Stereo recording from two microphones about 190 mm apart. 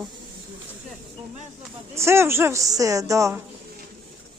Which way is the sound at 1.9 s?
15° right (ahead or behind).